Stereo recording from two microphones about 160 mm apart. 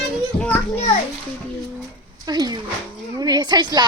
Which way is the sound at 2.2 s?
25° right (ahead or behind).